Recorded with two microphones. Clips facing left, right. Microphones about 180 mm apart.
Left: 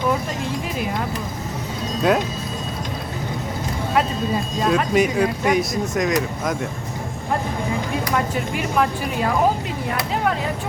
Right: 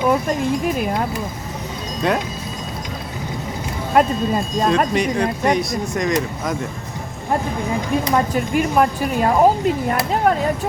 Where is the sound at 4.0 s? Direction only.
50° right (ahead or behind).